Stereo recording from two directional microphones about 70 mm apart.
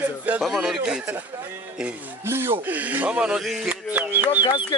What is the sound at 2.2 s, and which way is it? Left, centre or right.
Speech, right.